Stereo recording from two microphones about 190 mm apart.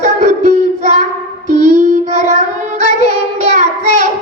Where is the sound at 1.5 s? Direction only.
40° right (ahead or behind).